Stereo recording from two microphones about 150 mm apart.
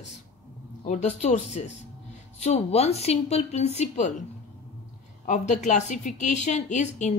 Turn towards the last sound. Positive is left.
turn(degrees=50)  # may be behind; listen again after turning